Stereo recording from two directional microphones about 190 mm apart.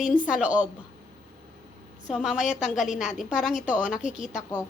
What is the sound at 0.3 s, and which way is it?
Speech, 5° right (ahead or behind).